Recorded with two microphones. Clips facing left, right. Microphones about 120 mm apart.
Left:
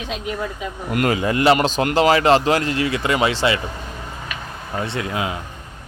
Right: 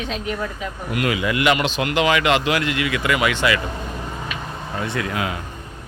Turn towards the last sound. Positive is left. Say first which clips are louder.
# even
turn(degrees=25)  # may be behind; listen again after turning